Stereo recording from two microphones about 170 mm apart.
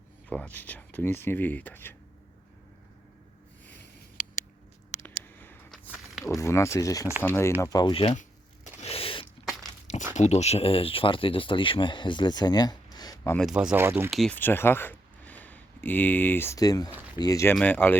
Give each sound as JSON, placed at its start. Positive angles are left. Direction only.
{"t": 0.3, "sound": "speech", "side_deg": 10}
{"t": 5.0, "sound": "a sound", "side_deg": 10}
{"t": 6.2, "sound": "speech", "side_deg": 15}
{"t": 8.2, "sound": "a sound", "side_deg": 40}
{"t": 10.2, "sound": "speech", "side_deg": 40}
{"t": 13.4, "sound": "speech", "side_deg": -5}
{"t": 14.1, "sound": "speech", "side_deg": 0}
{"t": 14.3, "sound": "speech", "side_deg": 10}
{"t": 17.5, "sound": "speech", "side_deg": 10}